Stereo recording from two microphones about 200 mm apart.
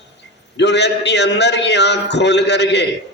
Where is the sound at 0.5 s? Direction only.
60° left (ahead or behind).